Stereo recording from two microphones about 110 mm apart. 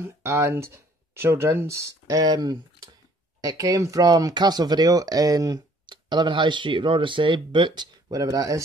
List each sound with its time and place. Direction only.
0.0 s speech: 25° right (ahead or behind)